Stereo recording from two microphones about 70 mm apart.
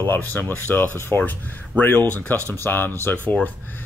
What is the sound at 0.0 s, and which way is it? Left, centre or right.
Speech, left.